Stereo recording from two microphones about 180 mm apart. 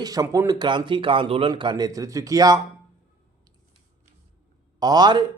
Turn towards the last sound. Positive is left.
turn(degrees=-25)  # may be behind; listen again after turning